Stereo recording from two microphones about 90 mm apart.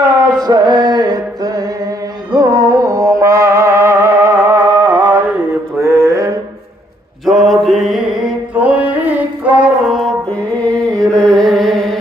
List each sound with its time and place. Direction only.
0.3 s music: 50° right (ahead or behind); by 4.6 s 35° right (ahead or behind)
4.8 s mantra: 15° right (ahead or behind)
5.8 s a sound: 40° right (ahead or behind)
7.3 s mantra: centre (ahead or behind)
8.5 s music: 15° right (ahead or behind)
9.6 s music: 5° right (ahead or behind)
10.3 s music: 15° left (ahead or behind)